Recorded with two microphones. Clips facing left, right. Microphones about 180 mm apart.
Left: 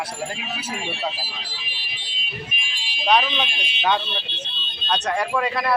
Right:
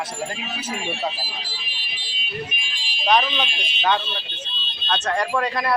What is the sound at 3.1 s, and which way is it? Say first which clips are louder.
Speech: even; 10° left (ahead or behind).